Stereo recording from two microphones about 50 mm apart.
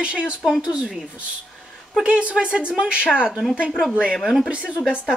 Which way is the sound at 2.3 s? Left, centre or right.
Centre.